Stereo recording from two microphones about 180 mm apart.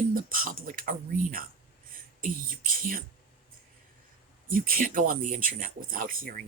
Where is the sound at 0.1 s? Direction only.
50° right (ahead or behind).